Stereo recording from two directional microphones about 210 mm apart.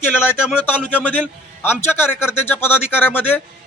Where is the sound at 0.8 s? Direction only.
5° left (ahead or behind).